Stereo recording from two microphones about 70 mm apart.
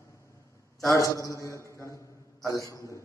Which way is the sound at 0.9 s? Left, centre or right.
Left.